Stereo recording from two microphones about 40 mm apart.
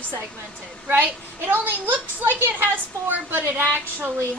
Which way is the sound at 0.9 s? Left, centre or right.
Right.